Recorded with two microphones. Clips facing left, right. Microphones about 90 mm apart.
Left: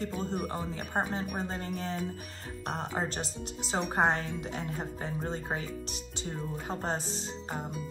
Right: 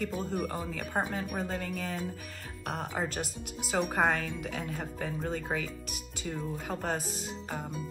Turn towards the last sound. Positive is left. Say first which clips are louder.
# even
turn(degrees=30)  # may be behind; listen again after turning